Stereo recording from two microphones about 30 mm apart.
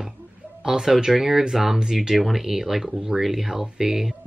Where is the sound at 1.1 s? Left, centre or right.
Centre.